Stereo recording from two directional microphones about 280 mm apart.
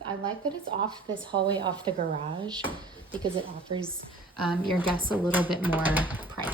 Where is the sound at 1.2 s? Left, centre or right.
Centre.